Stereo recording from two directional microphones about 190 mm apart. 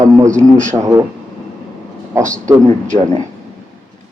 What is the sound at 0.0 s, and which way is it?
A man's voice, 15° right (ahead or behind).